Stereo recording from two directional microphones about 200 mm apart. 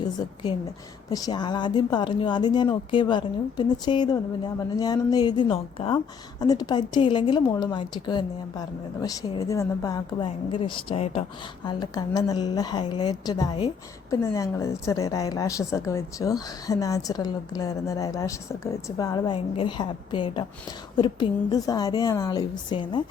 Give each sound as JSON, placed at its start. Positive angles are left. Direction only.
{"t": 0.0, "sound": "a woman's voice", "side_deg": 20}